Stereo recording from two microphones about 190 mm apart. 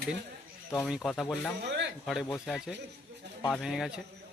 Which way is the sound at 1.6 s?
70° right (ahead or behind).